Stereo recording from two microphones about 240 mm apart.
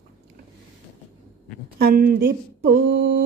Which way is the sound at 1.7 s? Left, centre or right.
Right.